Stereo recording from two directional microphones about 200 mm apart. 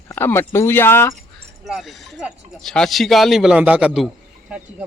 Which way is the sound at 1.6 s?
Centre (ahead or behind).